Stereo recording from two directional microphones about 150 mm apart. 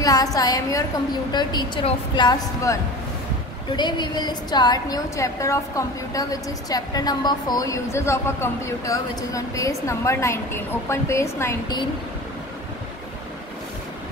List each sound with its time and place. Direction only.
0.0 s a woman's voice: 25° left (ahead or behind)